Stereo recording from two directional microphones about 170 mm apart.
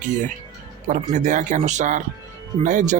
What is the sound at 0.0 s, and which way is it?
Speech, 45° right (ahead or behind).